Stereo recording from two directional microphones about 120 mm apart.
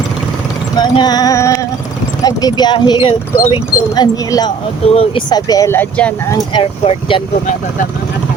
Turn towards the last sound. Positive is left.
turn(degrees=45)  # may be behind; listen again after turning